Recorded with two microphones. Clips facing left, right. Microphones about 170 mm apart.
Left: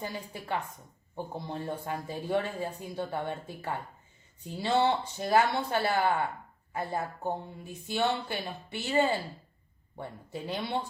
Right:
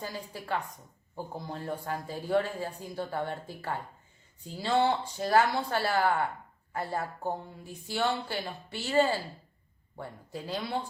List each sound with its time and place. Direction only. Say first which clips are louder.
0.0 s speech: left 1 dB; 20° left (ahead or behind)